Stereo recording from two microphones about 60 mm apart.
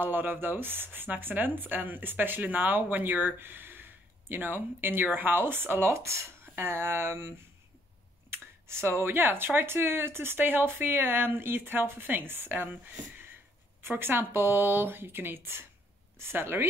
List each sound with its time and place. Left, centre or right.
0.0 s speech: right
5.9 s speech: right
13.8 s speech: right